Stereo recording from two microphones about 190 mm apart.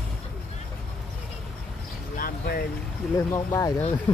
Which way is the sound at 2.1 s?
50° left (ahead or behind).